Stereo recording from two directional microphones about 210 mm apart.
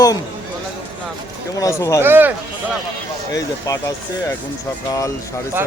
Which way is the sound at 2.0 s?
10° right (ahead or behind).